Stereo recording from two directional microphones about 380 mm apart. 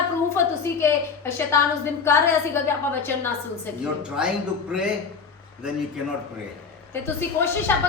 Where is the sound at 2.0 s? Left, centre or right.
Centre.